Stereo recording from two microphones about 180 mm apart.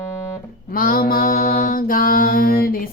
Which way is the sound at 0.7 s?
50° left (ahead or behind).